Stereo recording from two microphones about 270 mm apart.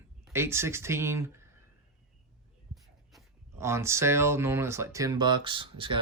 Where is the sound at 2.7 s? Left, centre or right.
Centre.